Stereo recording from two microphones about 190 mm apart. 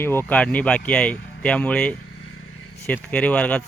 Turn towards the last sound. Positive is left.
turn(degrees=5)  # may be behind; listen again after turning